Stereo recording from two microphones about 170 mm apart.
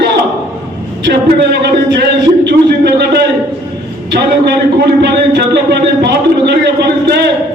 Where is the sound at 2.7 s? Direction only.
75° right (ahead or behind).